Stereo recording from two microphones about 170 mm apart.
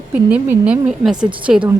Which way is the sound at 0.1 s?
10° right (ahead or behind).